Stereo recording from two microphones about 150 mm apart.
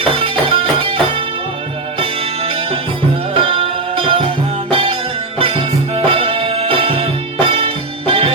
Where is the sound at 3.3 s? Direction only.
35° right (ahead or behind).